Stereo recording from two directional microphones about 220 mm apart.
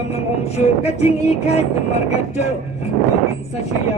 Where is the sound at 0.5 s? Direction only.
30° left (ahead or behind).